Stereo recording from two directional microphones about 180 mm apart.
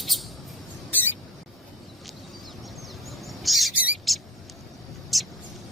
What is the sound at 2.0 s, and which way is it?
Bird, centre (ahead or behind).